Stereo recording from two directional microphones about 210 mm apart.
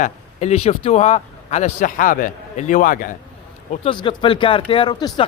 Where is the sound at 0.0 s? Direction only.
30° left (ahead or behind).